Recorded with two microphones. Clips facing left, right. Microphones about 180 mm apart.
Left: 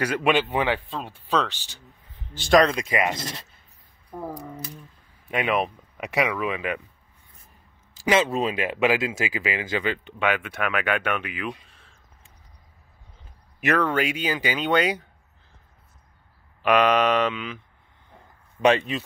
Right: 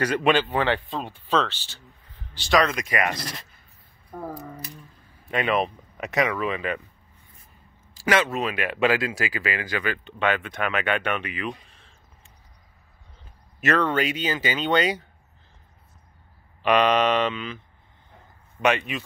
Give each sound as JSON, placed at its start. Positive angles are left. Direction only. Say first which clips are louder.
{"t": 0.0, "sound": "speech", "louder": "right 1 dB", "side_deg": 10}
{"t": 2.3, "sound": "speech", "louder": "left 4 dB", "side_deg": 50}
{"t": 2.6, "sound": "speech", "louder": "left 2 dB", "side_deg": 30}
{"t": 4.1, "sound": "speech", "louder": "left 1 dB", "side_deg": 15}
{"t": 7.9, "sound": "speech", "louder": "left 1 dB", "side_deg": 20}
{"t": 10.1, "sound": "speech", "louder": "right 2 dB", "side_deg": 10}
{"t": 13.6, "sound": "speech", "louder": "even", "side_deg": 10}
{"t": 16.6, "sound": "speech", "louder": "even", "side_deg": 5}
{"t": 18.6, "sound": "speech", "louder": "left 3 dB", "side_deg": 35}